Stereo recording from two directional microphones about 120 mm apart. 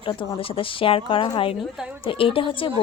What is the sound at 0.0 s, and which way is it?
A woman's voice, 45° left (ahead or behind).